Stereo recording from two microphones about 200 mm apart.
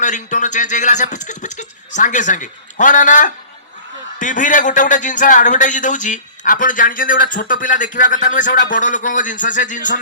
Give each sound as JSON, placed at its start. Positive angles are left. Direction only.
{"t": 0.0, "sound": "speech", "side_deg": 40}